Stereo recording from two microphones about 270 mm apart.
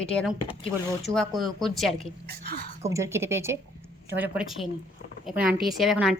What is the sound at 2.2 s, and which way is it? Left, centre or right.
Speech, right.